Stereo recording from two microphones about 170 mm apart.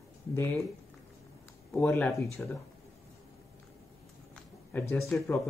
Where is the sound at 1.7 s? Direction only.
5° left (ahead or behind).